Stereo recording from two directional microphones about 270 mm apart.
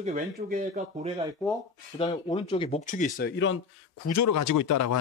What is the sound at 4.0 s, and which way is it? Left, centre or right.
Speech, left.